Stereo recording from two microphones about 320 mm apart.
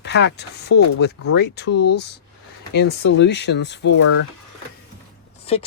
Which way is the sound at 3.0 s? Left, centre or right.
Left.